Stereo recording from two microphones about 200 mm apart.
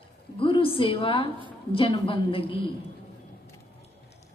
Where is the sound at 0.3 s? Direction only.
25° left (ahead or behind).